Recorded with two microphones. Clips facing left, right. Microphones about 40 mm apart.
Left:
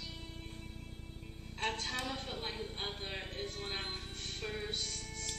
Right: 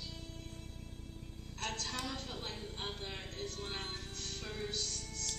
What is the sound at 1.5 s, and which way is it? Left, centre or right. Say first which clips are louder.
Music: left 3 dB; left.